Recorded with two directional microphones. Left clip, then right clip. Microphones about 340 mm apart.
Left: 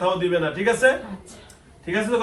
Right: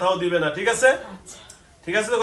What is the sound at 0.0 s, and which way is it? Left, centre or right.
Speech, right.